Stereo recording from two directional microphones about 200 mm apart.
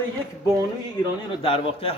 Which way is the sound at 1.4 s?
30° left (ahead or behind).